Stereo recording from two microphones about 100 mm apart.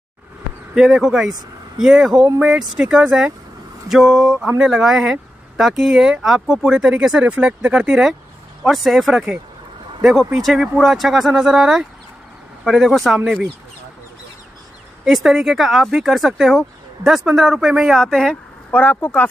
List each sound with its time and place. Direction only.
0.7 s speech: 5° right (ahead or behind)
15.0 s speech: 5° right (ahead or behind)
18.7 s speech: 15° left (ahead or behind)